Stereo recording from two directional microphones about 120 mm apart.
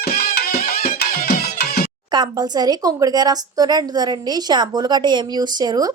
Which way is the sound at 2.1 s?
35° right (ahead or behind).